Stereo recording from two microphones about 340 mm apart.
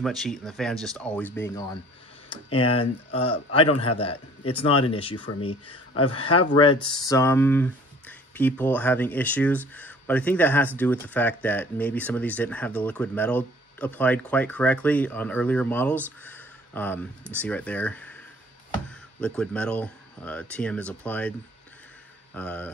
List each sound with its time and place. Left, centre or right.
0.0 s speech: centre
2.5 s speech: left
2.8 s a man's voice: centre
16.3 s a sound: centre
17.4 s speech: centre
22.3 s speech: centre